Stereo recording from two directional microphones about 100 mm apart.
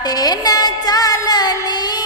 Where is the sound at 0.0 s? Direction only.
40° left (ahead or behind).